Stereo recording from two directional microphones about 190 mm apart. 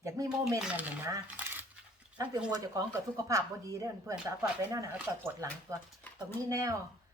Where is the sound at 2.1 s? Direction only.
20° right (ahead or behind).